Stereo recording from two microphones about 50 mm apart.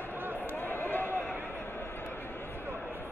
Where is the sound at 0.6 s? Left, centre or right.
Left.